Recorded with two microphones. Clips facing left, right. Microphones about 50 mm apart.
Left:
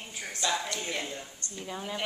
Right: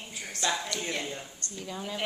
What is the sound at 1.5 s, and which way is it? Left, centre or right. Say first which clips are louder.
Speech: even; left.